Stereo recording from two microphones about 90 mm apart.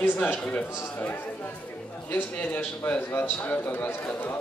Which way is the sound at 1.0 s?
20° left (ahead or behind).